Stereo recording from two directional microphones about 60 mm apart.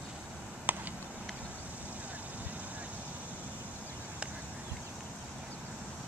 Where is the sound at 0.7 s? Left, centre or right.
Right.